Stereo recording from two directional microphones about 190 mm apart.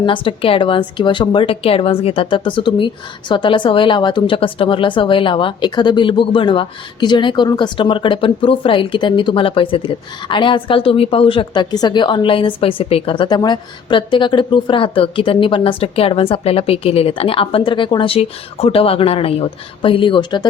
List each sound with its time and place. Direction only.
0.0 s a woman's voice: 25° left (ahead or behind)